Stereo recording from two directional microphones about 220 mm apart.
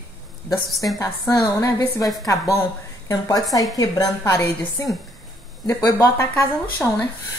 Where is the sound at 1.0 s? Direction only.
15° left (ahead or behind).